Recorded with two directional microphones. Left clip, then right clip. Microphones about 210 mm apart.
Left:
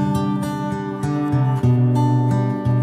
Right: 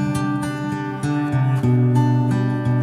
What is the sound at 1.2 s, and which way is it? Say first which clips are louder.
Music: left 1 dB; 35° left (ahead or behind).